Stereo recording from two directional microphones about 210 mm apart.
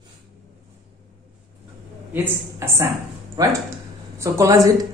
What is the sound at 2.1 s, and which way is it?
A woman's voice, 10° right (ahead or behind).